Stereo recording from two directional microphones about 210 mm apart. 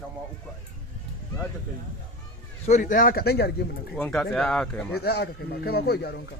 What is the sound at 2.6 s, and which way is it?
Speech, 35° left (ahead or behind).